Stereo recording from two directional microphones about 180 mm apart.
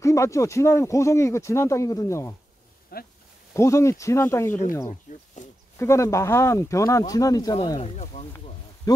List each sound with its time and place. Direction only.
0.0 s speech: 15° left (ahead or behind)
2.9 s speech: 55° left (ahead or behind)
3.5 s speech: 15° left (ahead or behind)
5.1 s a sound: 45° left (ahead or behind)
5.8 s speech: 15° left (ahead or behind); by 8.3 s 35° left (ahead or behind)
8.9 s speech: 20° left (ahead or behind)